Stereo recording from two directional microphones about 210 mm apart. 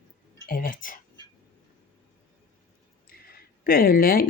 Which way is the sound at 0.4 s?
40° left (ahead or behind).